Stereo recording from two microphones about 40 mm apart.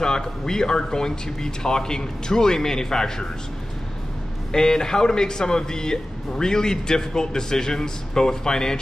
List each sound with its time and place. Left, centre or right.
0.0 s speech: centre
4.5 s speech: centre